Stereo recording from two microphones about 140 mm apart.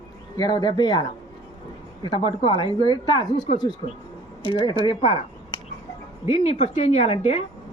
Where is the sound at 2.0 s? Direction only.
35° left (ahead or behind).